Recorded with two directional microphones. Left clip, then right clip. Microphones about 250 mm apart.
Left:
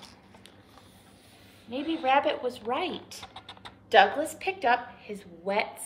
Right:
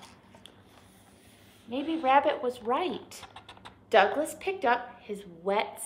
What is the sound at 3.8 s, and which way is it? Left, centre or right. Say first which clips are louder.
A woman's voice: left 2 dB; centre.